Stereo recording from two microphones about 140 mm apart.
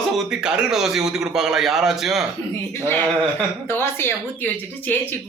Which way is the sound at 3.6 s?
15° left (ahead or behind).